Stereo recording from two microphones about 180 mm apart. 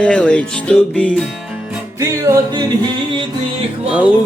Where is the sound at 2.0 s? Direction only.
15° right (ahead or behind).